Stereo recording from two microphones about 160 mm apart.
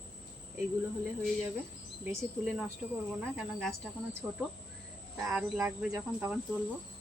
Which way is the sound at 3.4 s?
5° left (ahead or behind).